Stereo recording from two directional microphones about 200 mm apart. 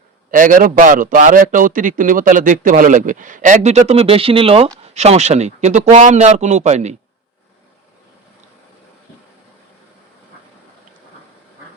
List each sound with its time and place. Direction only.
0.3 s a man's voice: 40° right (ahead or behind)